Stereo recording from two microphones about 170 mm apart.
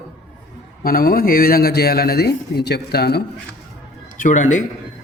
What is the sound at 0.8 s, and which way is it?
A man's voice, 60° left (ahead or behind).